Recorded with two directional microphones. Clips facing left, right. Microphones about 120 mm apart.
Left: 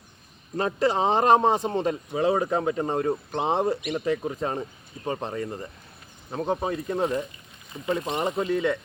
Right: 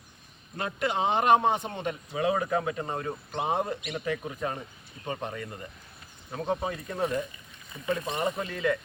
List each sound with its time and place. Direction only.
0.5 s a man's voice: 35° left (ahead or behind)